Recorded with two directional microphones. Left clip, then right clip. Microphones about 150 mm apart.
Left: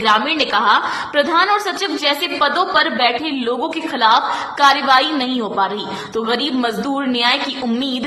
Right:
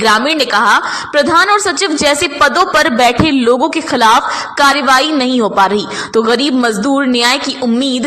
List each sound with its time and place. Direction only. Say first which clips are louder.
0.0 s a woman's voice: right 4 dB; 40° right (ahead or behind)